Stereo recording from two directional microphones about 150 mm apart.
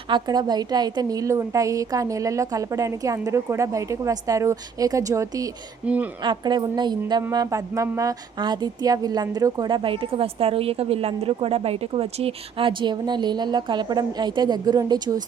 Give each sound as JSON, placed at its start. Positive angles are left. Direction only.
{"t": 0.1, "sound": "a woman's voice", "side_deg": -30}
{"t": 5.8, "sound": "speech", "side_deg": -10}
{"t": 6.2, "sound": "a woman's voice", "side_deg": -30}